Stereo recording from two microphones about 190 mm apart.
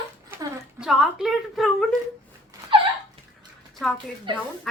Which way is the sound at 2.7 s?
25° right (ahead or behind).